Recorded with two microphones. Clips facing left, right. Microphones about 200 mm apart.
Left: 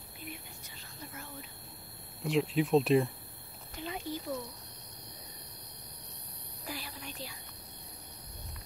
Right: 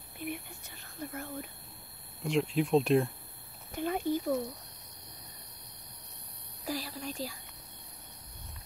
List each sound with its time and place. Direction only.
0.2 s whispering: 55° right (ahead or behind)
0.9 s speech: 55° right (ahead or behind)
2.2 s speech: centre (ahead or behind)
3.7 s a sound: 50° right (ahead or behind)
6.7 s speech: 40° right (ahead or behind)